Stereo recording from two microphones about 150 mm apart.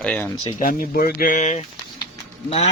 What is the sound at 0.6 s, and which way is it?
Speech, 75° left (ahead or behind).